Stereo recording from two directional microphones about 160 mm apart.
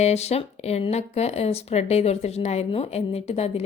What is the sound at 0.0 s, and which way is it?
A woman's voice, 45° left (ahead or behind).